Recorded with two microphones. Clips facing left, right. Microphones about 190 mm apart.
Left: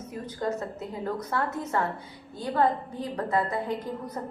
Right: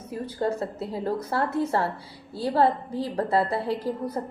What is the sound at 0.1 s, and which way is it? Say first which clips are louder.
A woman's voice: right 4 dB; 30° right (ahead or behind).